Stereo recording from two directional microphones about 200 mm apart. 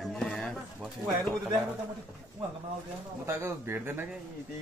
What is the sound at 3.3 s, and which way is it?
Speech, 15° right (ahead or behind).